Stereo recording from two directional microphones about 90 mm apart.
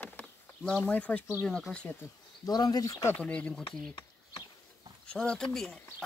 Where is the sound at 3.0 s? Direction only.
15° left (ahead or behind).